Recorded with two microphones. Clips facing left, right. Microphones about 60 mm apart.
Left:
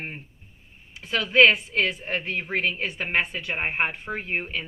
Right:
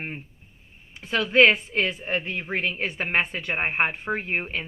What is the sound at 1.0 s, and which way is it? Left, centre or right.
Speech, right.